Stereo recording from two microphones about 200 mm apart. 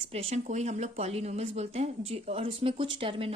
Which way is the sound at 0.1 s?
30° right (ahead or behind).